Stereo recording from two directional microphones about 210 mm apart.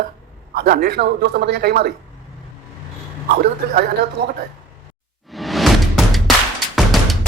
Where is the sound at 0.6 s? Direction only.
45° right (ahead or behind).